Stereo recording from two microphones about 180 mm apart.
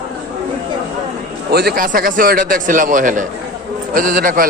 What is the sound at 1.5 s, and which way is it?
A man's voice, 60° right (ahead or behind).